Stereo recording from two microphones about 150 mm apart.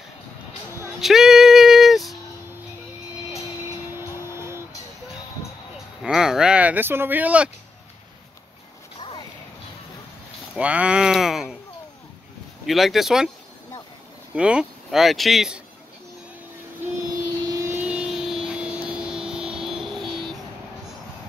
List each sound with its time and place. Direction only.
1.0 s music: centre (ahead or behind)
3.9 s vehicle: 15° right (ahead or behind)
6.0 s speech: 5° right (ahead or behind)
10.5 s a sound: 10° right (ahead or behind)
12.6 s speech: centre (ahead or behind)
14.3 s speech: 5° right (ahead or behind)
17.5 s vehicle: 20° right (ahead or behind)
17.7 s a sound: 5° right (ahead or behind)